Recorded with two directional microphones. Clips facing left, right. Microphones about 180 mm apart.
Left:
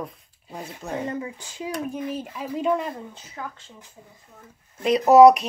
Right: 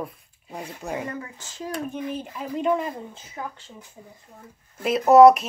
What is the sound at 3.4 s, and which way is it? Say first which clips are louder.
Speech: right 1 dB; 20° right (ahead or behind).